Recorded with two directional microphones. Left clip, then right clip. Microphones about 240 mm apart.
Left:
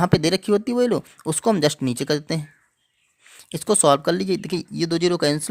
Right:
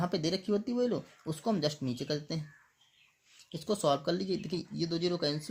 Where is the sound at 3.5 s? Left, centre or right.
Left.